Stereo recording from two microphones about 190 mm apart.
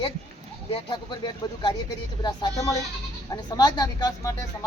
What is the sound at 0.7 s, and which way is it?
Speech, 25° left (ahead or behind).